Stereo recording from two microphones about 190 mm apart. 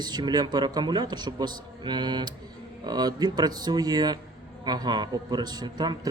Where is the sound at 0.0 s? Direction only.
20° right (ahead or behind).